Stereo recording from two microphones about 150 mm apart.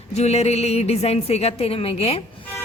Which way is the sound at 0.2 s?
45° left (ahead or behind).